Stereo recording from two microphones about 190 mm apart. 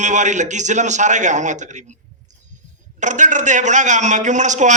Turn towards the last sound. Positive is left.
turn(degrees=-40)  # may be behind; listen again after turning